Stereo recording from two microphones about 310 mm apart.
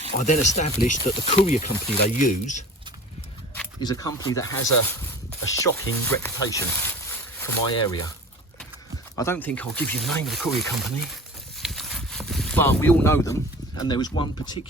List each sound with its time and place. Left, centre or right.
0.1 s speech: left
3.5 s speech: centre
9.1 s speech: centre